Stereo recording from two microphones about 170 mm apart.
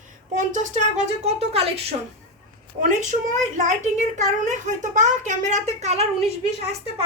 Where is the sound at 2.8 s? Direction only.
50° right (ahead or behind).